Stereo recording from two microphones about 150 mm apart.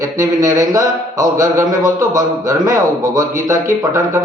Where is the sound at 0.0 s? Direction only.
20° right (ahead or behind).